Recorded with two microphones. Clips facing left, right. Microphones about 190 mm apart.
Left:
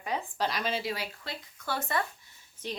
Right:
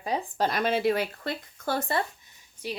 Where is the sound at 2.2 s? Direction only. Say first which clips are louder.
Right 3 dB; 15° right (ahead or behind).